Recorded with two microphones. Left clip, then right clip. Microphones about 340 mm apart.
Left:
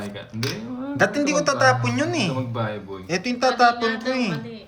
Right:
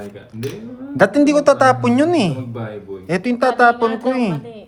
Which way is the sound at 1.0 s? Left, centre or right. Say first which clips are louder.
Right 7 dB; centre.